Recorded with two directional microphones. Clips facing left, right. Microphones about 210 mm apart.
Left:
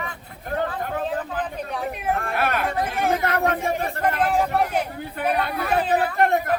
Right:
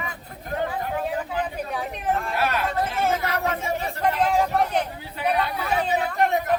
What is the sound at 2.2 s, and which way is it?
Speech, 55° left (ahead or behind).